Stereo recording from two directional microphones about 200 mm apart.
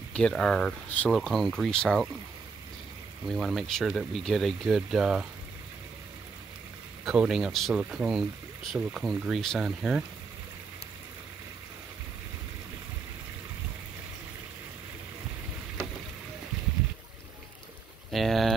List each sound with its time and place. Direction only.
0.1 s speech: 5° left (ahead or behind)
3.3 s speech: centre (ahead or behind)
7.1 s speech: 5° right (ahead or behind)
18.1 s a sound: centre (ahead or behind)